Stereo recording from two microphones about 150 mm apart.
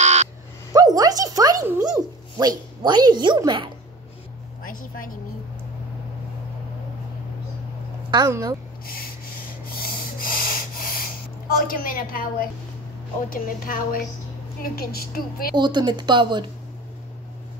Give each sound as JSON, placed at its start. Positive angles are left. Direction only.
{"t": 0.0, "sound": "a sound", "side_deg": -50}
{"t": 0.7, "sound": "speech", "side_deg": -25}
{"t": 8.1, "sound": "speech", "side_deg": -25}
{"t": 9.7, "sound": "sanding", "side_deg": 80}
{"t": 11.6, "sound": "a woman's voice", "side_deg": 70}
{"t": 14.6, "sound": "a woman's voice", "side_deg": 90}
{"t": 15.5, "sound": "speech", "side_deg": -30}